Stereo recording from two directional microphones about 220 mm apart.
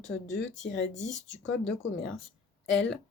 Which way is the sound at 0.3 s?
55° left (ahead or behind).